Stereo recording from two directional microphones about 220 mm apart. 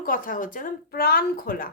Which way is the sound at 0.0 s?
40° left (ahead or behind).